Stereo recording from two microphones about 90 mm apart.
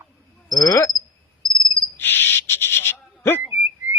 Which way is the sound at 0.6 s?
45° left (ahead or behind).